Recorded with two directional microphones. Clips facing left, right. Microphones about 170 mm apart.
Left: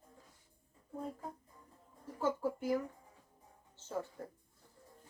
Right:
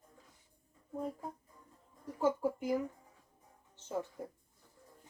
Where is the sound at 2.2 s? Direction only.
15° right (ahead or behind).